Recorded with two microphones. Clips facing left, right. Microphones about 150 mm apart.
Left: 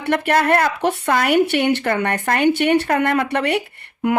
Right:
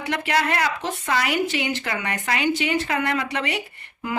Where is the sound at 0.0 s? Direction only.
55° left (ahead or behind).